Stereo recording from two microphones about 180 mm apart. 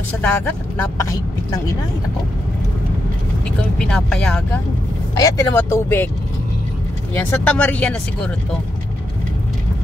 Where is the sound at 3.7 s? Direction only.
5° left (ahead or behind).